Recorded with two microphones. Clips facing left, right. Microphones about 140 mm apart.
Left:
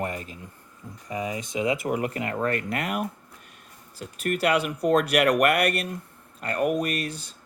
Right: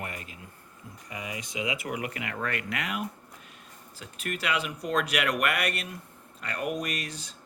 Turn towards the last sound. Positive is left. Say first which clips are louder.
# left 6 dB
turn(degrees=55)  # may be behind; listen again after turning